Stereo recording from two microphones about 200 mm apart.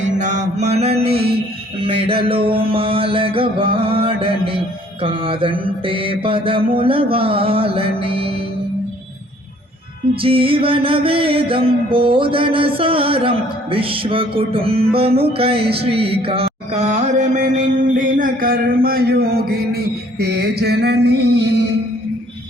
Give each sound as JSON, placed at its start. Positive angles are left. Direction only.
{"t": 0.0, "sound": "mantra", "side_deg": -35}
{"t": 1.0, "sound": "music", "side_deg": -50}
{"t": 1.8, "sound": "music", "side_deg": -25}
{"t": 10.2, "sound": "music", "side_deg": -25}
{"t": 15.8, "sound": "mantra", "side_deg": -30}